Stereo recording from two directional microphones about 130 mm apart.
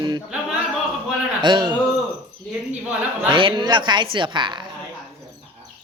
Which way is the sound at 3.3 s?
40° right (ahead or behind).